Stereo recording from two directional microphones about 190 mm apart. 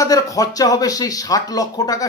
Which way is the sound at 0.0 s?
20° left (ahead or behind).